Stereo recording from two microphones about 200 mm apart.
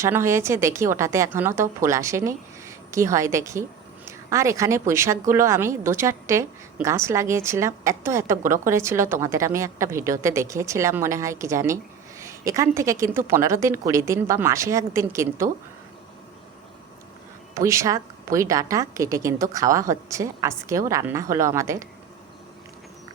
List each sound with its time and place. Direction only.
0.0 s a woman's voice: 15° right (ahead or behind)
17.5 s a woman's voice: 15° right (ahead or behind)